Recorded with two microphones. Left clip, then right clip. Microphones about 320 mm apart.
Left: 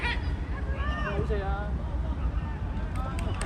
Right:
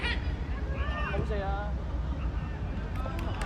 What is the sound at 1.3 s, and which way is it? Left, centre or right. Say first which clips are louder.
Speech: left 1 dB; right.